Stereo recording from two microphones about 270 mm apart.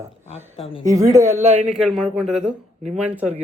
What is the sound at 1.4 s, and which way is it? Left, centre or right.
Speech, right.